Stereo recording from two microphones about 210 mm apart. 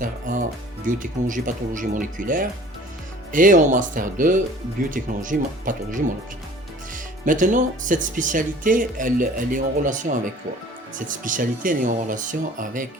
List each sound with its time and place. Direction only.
0.0 s music: 40° right (ahead or behind)
0.9 s speech: 40° right (ahead or behind)